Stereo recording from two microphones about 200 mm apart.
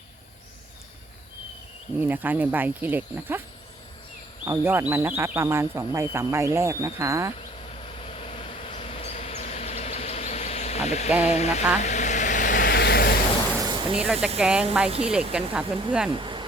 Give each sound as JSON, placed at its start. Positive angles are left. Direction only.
{"t": 2.0, "sound": "speech", "side_deg": -10}
{"t": 4.4, "sound": "speech", "side_deg": -10}
{"t": 8.2, "sound": "vehicle", "side_deg": 25}
{"t": 11.3, "sound": "a sound", "side_deg": 30}
{"t": 11.8, "sound": "vehicle", "side_deg": 35}
{"t": 13.6, "sound": "a sound", "side_deg": -20}
{"t": 14.0, "sound": "speech", "side_deg": -5}
{"t": 16.0, "sound": "speech", "side_deg": -25}